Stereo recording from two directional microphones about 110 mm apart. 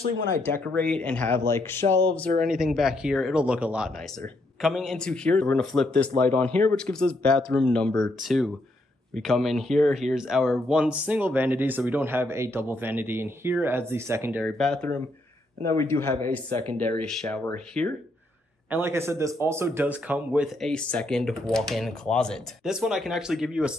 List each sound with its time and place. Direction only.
0.4 s a man's voice: 20° left (ahead or behind)
1.4 s a man's voice: 25° left (ahead or behind)
2.4 s a man's voice: 5° right (ahead or behind); by 14.4 s 25° right (ahead or behind)
14.4 s speech: 5° left (ahead or behind)
15.6 s a man's voice: 25° left (ahead or behind); by 17.9 s 10° left (ahead or behind)
18.7 s a man's voice: 20° right (ahead or behind)
20.6 s speech: 10° left (ahead or behind)
22.7 s speech: 5° right (ahead or behind)